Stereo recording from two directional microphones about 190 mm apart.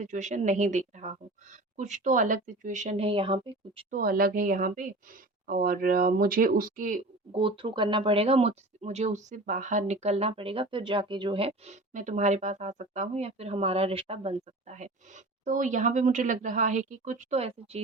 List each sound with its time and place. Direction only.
0.0 s speech: 40° right (ahead or behind)
3.9 s speech: 50° right (ahead or behind)
7.3 s speech: 25° right (ahead or behind)